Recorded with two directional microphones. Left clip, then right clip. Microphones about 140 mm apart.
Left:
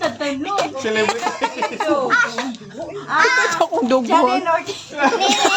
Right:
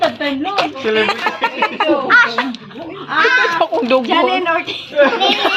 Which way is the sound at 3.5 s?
35° left (ahead or behind).